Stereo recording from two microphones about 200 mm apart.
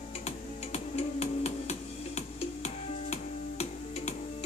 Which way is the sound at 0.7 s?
30° left (ahead or behind).